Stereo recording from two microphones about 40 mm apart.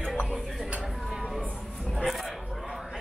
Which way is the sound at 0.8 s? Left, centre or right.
Centre.